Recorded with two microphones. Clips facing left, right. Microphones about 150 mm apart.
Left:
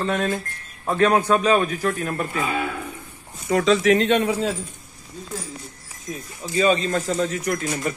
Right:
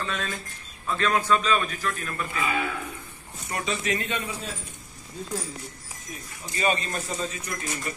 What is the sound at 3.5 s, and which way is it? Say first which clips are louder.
Speech: left 12 dB; 90° left.